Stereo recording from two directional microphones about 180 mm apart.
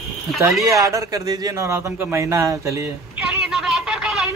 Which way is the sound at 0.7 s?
20° right (ahead or behind).